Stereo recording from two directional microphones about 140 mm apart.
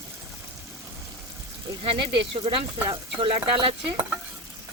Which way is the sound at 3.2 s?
40° right (ahead or behind).